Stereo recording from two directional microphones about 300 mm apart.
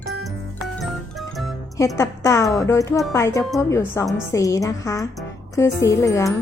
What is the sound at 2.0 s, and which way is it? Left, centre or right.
Speech, centre.